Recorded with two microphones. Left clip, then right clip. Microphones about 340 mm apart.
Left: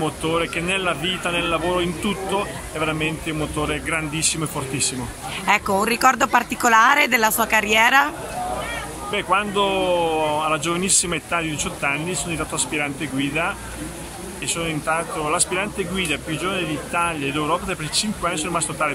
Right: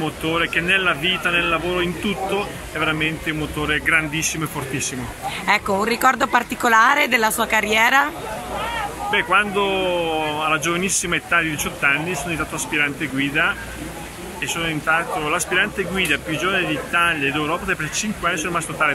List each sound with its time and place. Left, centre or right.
0.0 s speech: centre
9.1 s speech: centre